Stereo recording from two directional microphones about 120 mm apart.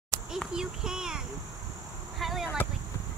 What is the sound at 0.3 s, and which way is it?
Child singing, 5° right (ahead or behind).